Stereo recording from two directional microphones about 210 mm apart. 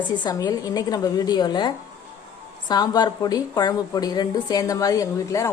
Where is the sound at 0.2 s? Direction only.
20° left (ahead or behind).